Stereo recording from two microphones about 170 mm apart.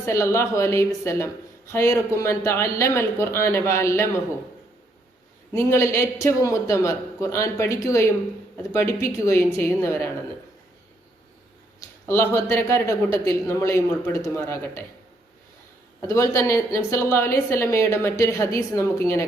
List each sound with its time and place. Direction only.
0.0 s a woman's voice: 15° left (ahead or behind)
5.5 s a woman's voice: 15° left (ahead or behind)
12.0 s a woman's voice: 15° left (ahead or behind)
16.0 s a woman's voice: 15° left (ahead or behind)